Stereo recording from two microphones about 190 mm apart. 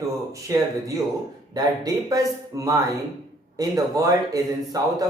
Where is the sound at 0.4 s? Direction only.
15° right (ahead or behind).